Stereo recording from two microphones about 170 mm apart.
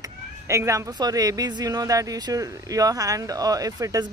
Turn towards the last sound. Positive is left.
turn(degrees=-20)  # may be behind; listen again after turning